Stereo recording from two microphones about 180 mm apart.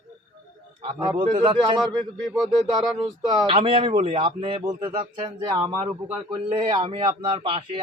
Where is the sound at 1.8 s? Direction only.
Centre (ahead or behind).